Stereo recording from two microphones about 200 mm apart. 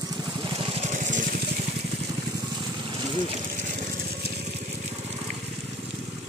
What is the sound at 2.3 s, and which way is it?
Vehicle, 20° right (ahead or behind).